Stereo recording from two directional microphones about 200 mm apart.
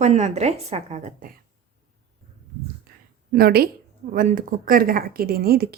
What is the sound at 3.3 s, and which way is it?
Speech, 50° right (ahead or behind).